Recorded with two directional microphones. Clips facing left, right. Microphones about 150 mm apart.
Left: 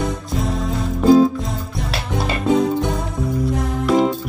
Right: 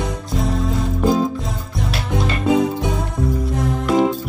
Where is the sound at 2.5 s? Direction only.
Centre (ahead or behind).